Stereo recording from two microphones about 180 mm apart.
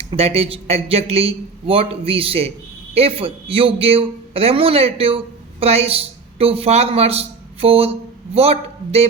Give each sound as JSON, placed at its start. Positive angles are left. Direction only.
{"t": 0.1, "sound": "a man's voice", "side_deg": -35}